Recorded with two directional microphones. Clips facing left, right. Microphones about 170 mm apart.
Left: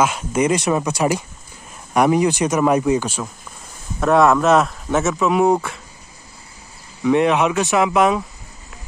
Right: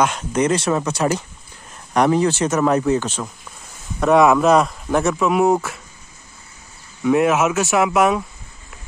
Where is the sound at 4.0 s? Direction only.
Centre (ahead or behind).